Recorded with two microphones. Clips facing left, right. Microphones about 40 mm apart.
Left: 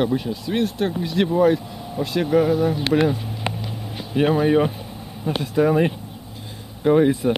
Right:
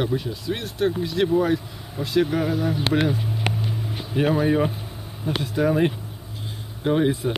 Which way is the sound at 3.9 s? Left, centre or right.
Left.